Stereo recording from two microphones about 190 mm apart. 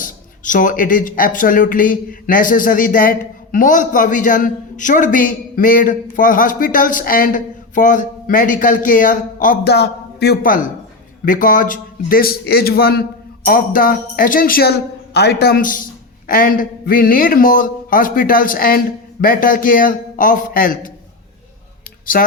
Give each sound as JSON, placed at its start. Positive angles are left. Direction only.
{"t": 0.0, "sound": "speech", "side_deg": 45}
{"t": 22.1, "sound": "speech", "side_deg": 50}